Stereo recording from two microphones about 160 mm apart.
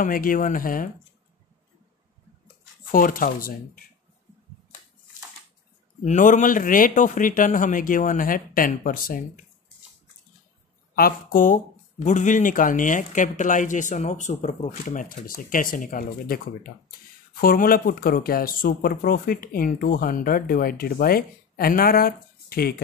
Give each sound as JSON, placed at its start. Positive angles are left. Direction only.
{"t": 0.0, "sound": "speech", "side_deg": 60}
{"t": 2.9, "sound": "speech", "side_deg": 60}
{"t": 6.0, "sound": "speech", "side_deg": 50}
{"t": 11.0, "sound": "speech", "side_deg": 65}